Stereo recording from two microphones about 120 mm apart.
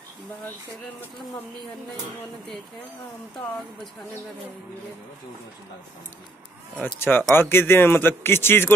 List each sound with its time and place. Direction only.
6.8 s a man's voice: 15° left (ahead or behind)